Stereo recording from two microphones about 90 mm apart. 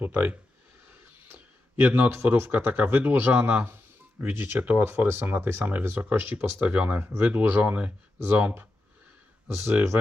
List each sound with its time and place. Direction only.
0.0 s speech: 20° right (ahead or behind)
1.8 s speech: 25° right (ahead or behind)